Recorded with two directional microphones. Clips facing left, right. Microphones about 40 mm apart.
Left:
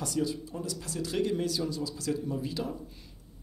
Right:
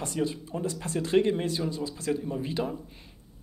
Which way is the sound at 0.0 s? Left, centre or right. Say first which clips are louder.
Right 1 dB; right.